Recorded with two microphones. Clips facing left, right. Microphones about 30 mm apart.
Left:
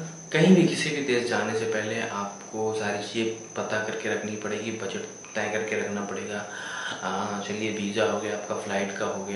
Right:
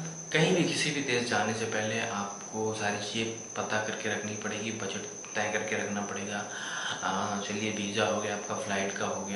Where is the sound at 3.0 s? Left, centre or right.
Centre.